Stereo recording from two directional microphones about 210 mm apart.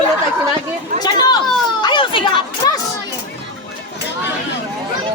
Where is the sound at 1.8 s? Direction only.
25° left (ahead or behind).